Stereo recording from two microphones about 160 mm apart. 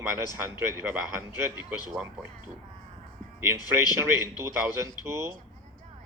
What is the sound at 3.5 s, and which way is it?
Speech, 25° left (ahead or behind).